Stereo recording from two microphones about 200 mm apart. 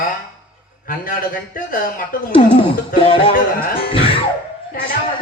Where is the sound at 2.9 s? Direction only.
25° left (ahead or behind).